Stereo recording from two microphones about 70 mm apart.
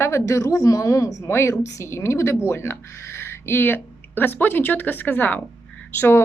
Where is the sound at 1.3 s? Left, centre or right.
Left.